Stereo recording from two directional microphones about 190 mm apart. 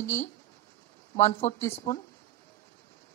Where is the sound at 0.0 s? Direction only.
15° left (ahead or behind).